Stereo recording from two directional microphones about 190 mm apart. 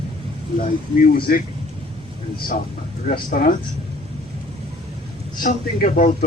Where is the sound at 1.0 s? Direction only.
50° left (ahead or behind).